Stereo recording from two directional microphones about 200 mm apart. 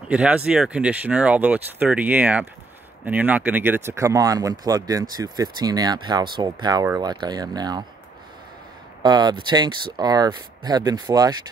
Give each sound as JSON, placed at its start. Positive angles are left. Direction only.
{"t": 0.1, "sound": "speech", "side_deg": -5}
{"t": 9.0, "sound": "speech", "side_deg": -20}